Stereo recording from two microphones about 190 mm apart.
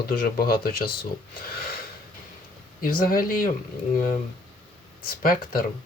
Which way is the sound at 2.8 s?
50° left (ahead or behind).